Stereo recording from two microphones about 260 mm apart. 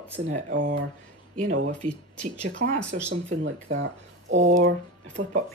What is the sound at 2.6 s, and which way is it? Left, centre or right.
Speech, right.